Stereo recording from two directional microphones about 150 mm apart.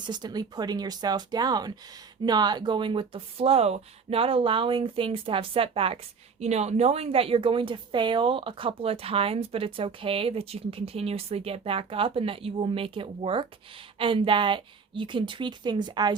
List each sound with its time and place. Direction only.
0.0 s speech: 30° right (ahead or behind)